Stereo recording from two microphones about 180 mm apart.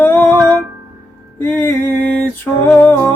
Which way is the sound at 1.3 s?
10° left (ahead or behind).